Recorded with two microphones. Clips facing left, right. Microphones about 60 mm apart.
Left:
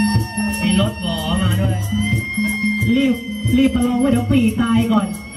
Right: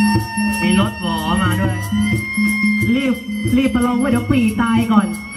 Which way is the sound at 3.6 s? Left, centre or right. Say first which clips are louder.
Left 1 dB; right.